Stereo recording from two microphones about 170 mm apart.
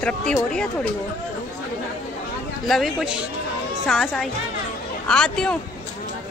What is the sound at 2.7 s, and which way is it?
Speech, centre (ahead or behind).